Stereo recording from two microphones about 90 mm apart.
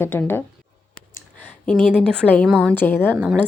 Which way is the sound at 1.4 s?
15° left (ahead or behind).